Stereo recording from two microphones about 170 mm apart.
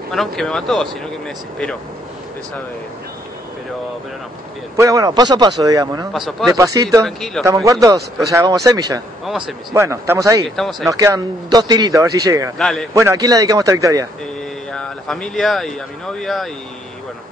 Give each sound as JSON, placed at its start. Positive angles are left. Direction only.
{"t": 0.1, "sound": "speech", "side_deg": 0}
{"t": 4.7, "sound": "speech", "side_deg": -20}
{"t": 6.1, "sound": "speech", "side_deg": 0}
{"t": 6.5, "sound": "speech", "side_deg": -20}
{"t": 7.1, "sound": "speech", "side_deg": 0}
{"t": 7.6, "sound": "speech", "side_deg": -20}
{"t": 9.2, "sound": "speech", "side_deg": 0}
{"t": 9.8, "sound": "speech", "side_deg": -15}
{"t": 10.4, "sound": "speech", "side_deg": 0}
{"t": 10.9, "sound": "speech", "side_deg": -20}
{"t": 12.5, "sound": "speech", "side_deg": 5}
{"t": 12.9, "sound": "speech", "side_deg": -20}
{"t": 14.7, "sound": "speech", "side_deg": 5}